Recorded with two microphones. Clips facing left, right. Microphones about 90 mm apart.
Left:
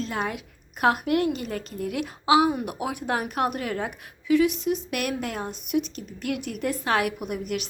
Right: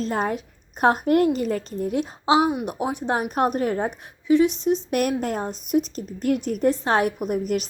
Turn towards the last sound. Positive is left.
turn(degrees=-40)  # may be behind; listen again after turning